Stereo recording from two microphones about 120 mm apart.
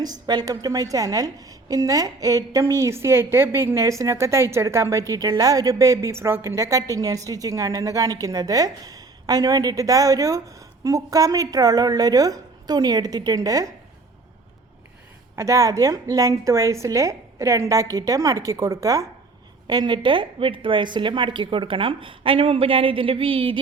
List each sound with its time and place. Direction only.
0.0 s a woman's voice: 35° right (ahead or behind)
15.4 s a woman's voice: 25° right (ahead or behind); by 23.6 s 50° right (ahead or behind)